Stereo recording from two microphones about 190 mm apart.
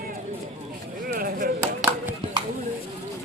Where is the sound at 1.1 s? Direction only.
45° right (ahead or behind).